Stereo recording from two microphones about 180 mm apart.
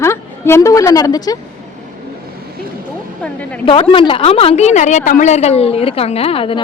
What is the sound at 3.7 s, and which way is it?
A woman's voice, 30° left (ahead or behind).